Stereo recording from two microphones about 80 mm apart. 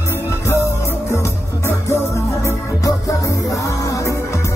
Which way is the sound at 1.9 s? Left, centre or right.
Left.